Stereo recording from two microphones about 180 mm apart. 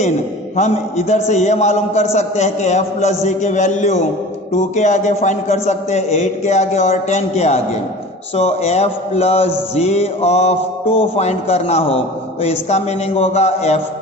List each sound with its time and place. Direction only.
0.5 s a man's voice: 40° left (ahead or behind)